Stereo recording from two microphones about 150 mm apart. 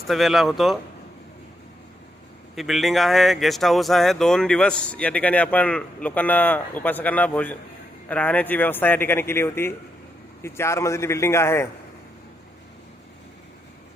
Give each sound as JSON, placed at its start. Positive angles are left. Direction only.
{"t": 0.1, "sound": "speech", "side_deg": 0}
{"t": 2.6, "sound": "speech", "side_deg": 0}